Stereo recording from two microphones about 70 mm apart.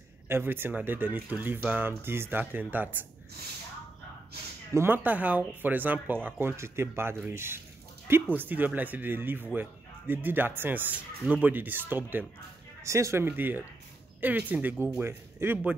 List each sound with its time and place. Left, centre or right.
0.3 s speech: right
4.7 s speech: right
6.4 s speech: right
12.8 s speech: right